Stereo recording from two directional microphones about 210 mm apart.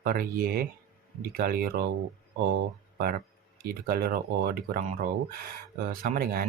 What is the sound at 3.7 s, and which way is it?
Speech, 45° right (ahead or behind).